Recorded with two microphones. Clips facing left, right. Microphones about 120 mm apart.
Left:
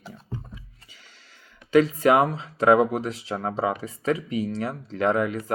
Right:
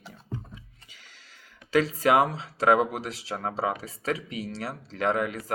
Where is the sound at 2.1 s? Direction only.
40° left (ahead or behind).